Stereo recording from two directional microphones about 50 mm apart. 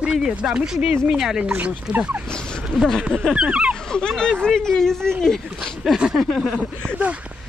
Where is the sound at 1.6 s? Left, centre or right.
Right.